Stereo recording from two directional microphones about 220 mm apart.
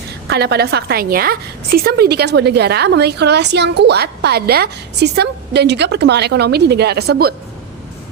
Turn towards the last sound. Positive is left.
turn(degrees=-45)  # may be behind; listen again after turning